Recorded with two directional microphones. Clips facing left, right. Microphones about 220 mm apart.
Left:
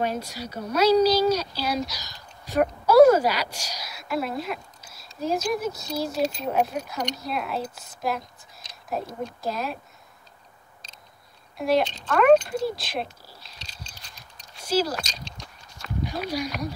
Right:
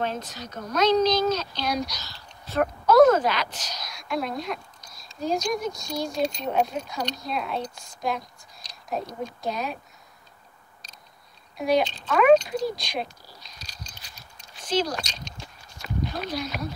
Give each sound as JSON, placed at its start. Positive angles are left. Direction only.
{"t": 0.0, "sound": "a woman's voice", "side_deg": 10}
{"t": 9.2, "sound": "a woman's voice", "side_deg": 0}
{"t": 11.5, "sound": "a woman's voice", "side_deg": 0}
{"t": 14.6, "sound": "speech", "side_deg": 5}
{"t": 16.1, "sound": "speech", "side_deg": 10}